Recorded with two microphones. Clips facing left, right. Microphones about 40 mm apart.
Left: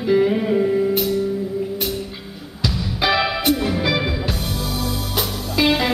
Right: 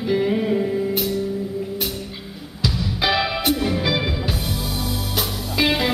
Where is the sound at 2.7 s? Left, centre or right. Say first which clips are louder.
Left 2 dB; centre.